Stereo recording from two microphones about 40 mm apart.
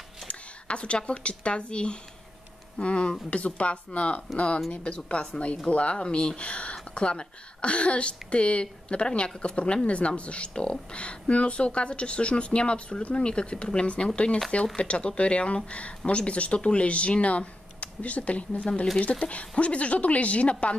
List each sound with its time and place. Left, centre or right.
0.3 s speech: left